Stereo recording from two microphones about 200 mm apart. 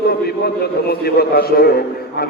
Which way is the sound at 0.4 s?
50° left (ahead or behind).